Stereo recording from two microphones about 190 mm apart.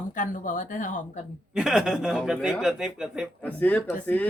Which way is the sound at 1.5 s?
5° right (ahead or behind).